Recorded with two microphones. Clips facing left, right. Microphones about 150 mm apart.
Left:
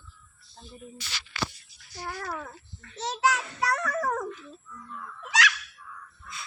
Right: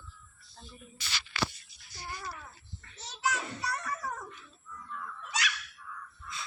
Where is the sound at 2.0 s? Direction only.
85° left.